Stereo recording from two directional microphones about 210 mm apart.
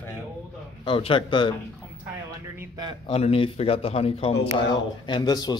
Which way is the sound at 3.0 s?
30° left (ahead or behind).